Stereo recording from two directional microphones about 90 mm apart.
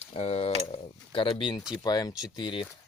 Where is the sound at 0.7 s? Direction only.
75° left (ahead or behind).